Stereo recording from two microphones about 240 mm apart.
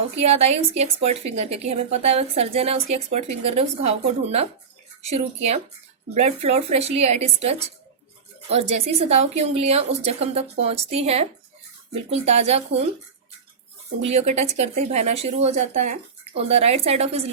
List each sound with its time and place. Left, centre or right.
0.2 s a woman's voice: right
8.4 s a woman's voice: right
14.0 s a woman's voice: right